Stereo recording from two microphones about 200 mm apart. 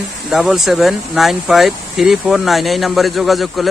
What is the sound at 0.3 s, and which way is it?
Speech, centre (ahead or behind).